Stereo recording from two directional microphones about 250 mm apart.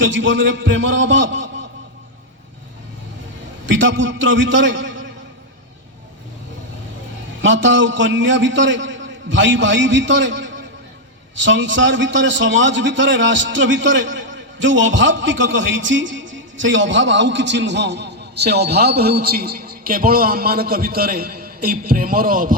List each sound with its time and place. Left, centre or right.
0.0 s a man's voice: right
3.7 s a man's voice: right
7.4 s a man's voice: right